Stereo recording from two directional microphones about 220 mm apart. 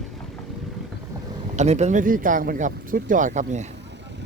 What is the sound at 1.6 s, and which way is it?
Speech, 30° right (ahead or behind).